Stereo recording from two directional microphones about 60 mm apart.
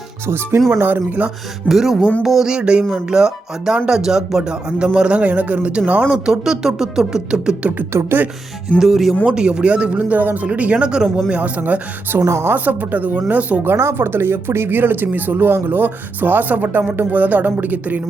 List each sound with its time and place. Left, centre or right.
0.7 s speech: right
1.6 s speech: centre
2.5 s speech: centre
6.1 s speech: centre
7.9 s a woman's voice: right
8.8 s speech: centre
9.2 s speech: centre
12.2 s a woman's voice: right
12.5 s speech: right
13.7 s speech: right